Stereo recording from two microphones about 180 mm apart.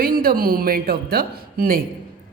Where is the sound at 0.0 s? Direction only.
55° right (ahead or behind).